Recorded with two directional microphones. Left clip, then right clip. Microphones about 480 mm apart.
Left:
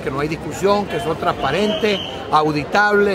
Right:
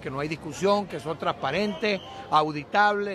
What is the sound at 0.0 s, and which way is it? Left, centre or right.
Speech, right.